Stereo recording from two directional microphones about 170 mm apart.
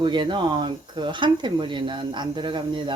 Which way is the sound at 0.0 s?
25° right (ahead or behind).